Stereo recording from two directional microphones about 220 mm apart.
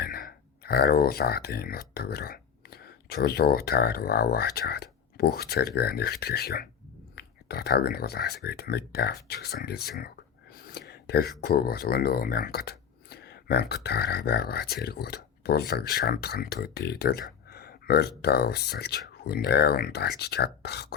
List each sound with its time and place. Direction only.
0.0 s speech: 45° left (ahead or behind)